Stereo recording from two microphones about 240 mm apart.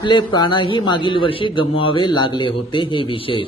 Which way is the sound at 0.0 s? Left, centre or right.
Centre.